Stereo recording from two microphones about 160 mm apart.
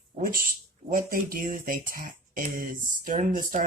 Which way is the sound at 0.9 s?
60° right (ahead or behind).